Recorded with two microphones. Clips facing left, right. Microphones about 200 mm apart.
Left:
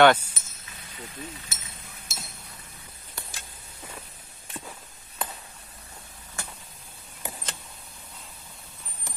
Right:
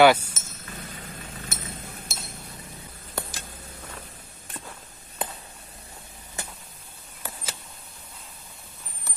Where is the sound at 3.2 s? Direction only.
55° right (ahead or behind).